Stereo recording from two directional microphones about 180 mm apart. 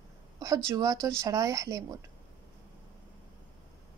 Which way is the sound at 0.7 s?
20° right (ahead or behind).